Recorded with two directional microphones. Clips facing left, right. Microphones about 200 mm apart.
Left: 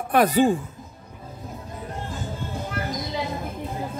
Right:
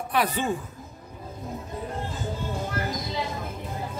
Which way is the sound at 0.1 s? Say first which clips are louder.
Left 8 dB; 40° left (ahead or behind).